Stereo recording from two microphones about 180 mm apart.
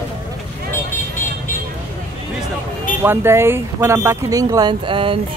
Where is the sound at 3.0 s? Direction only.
15° right (ahead or behind).